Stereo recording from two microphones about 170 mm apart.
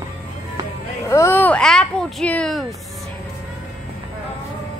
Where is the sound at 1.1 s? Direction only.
15° left (ahead or behind).